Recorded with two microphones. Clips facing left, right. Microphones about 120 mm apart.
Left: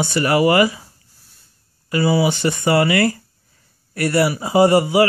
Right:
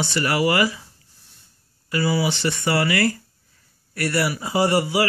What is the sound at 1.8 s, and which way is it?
Speech, 25° left (ahead or behind).